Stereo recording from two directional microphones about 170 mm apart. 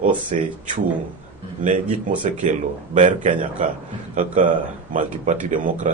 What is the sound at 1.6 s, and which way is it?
A man's voice, 50° right (ahead or behind).